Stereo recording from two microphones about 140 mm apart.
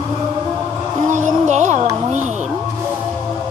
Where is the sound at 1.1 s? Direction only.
60° right (ahead or behind).